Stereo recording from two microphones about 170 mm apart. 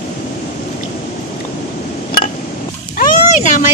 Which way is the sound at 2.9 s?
55° left (ahead or behind).